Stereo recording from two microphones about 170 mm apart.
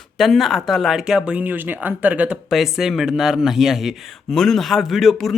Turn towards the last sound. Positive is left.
turn(degrees=0)  # may be behind; listen again after turning